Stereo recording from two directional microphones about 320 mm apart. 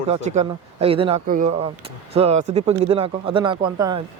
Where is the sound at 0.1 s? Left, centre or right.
Right.